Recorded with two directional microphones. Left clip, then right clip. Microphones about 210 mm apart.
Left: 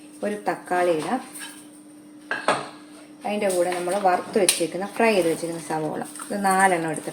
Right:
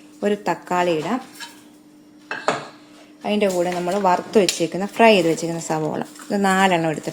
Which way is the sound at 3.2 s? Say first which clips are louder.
Right 3 dB; 45° right (ahead or behind).